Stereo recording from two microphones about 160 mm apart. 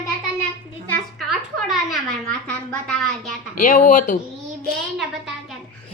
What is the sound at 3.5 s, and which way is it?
Speech, 50° left (ahead or behind).